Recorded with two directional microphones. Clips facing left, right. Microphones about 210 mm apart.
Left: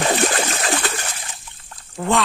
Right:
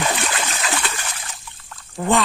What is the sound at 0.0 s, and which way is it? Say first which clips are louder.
Splash: left 5 dB; 45° left (ahead or behind).